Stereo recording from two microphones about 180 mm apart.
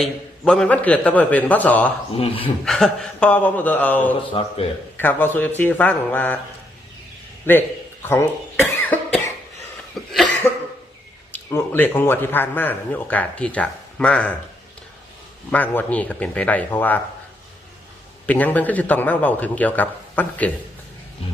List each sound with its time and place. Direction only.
0.0 s speech: 5° left (ahead or behind)
2.1 s speech: 30° left (ahead or behind)
2.6 s speech: 5° left (ahead or behind)
4.3 s speech: 30° left (ahead or behind)
4.9 s speech: 10° left (ahead or behind)
7.5 s speech: 10° left (ahead or behind)
8.0 s cough: 15° left (ahead or behind)
11.3 s speech: 10° left (ahead or behind)
15.5 s speech: 10° left (ahead or behind)
18.3 s speech: 10° left (ahead or behind)